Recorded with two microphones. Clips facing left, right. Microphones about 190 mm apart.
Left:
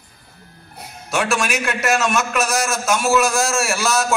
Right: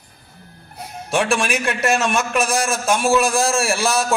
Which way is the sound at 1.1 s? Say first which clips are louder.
Right 1 dB; 30° right (ahead or behind).